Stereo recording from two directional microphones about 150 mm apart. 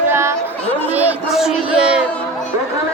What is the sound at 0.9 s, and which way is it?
Speech, 5° right (ahead or behind).